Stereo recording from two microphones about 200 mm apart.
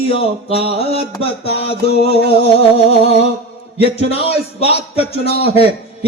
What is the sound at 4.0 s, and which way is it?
A man's voice, 30° left (ahead or behind).